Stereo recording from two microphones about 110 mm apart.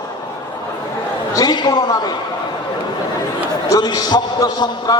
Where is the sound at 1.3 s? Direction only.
35° left (ahead or behind).